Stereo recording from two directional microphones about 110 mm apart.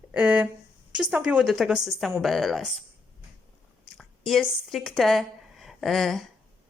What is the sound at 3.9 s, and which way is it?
A woman's voice, centre (ahead or behind).